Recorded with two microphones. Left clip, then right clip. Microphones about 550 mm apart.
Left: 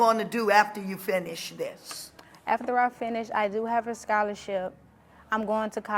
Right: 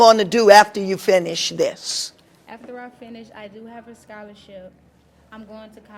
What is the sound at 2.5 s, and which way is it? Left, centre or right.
A woman's voice, left.